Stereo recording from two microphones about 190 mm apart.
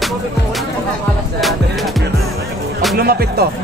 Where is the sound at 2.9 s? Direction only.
55° right (ahead or behind).